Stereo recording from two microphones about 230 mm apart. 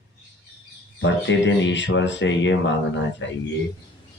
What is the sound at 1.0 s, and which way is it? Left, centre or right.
Speech, left.